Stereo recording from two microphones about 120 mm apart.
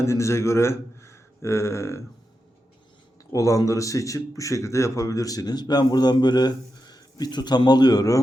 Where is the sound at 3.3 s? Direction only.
25° left (ahead or behind).